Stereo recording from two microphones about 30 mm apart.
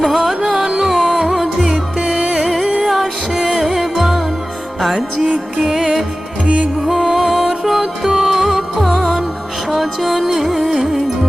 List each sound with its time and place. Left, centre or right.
0.0 s music: centre
5.6 s music: centre
7.6 s music: centre
8.4 s music: centre
8.8 s music: centre